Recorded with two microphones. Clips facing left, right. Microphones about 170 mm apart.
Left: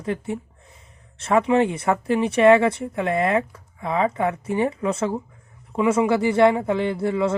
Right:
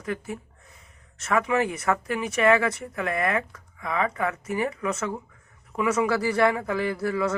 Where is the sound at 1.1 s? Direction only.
30° left (ahead or behind).